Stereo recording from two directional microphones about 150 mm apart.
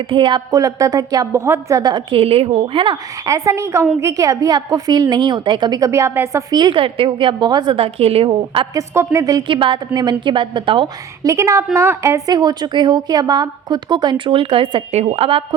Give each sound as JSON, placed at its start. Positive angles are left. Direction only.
{"t": 0.1, "sound": "a woman's voice", "side_deg": -30}
{"t": 3.2, "sound": "a woman's voice", "side_deg": -20}
{"t": 8.7, "sound": "a woman's voice", "side_deg": -20}
{"t": 11.3, "sound": "a woman's voice", "side_deg": -20}